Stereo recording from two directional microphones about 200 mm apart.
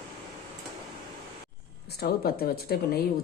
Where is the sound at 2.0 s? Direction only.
50° left (ahead or behind).